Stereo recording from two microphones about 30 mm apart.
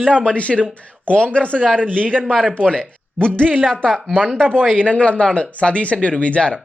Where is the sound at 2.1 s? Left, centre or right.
Left.